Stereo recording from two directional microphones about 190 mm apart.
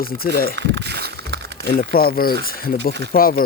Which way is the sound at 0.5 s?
65° right (ahead or behind).